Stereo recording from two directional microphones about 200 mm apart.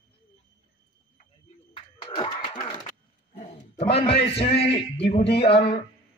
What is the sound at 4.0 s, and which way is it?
A man's voice, 30° left (ahead or behind).